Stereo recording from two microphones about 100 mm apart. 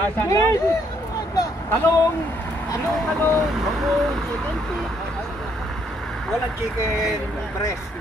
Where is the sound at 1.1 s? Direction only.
35° left (ahead or behind).